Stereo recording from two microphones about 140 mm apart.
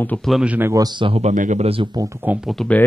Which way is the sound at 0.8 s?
35° right (ahead or behind).